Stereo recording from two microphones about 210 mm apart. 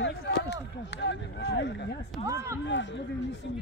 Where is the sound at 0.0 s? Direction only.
55° left (ahead or behind).